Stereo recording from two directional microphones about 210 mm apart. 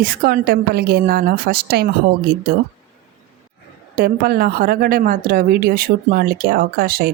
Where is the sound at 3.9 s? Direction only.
45° right (ahead or behind).